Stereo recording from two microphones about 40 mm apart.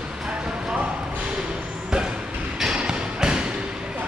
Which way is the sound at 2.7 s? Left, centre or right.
Centre.